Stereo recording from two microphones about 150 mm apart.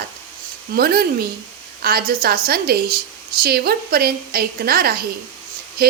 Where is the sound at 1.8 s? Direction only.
80° right.